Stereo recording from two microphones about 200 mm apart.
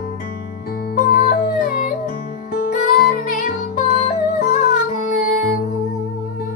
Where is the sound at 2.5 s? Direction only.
45° left (ahead or behind).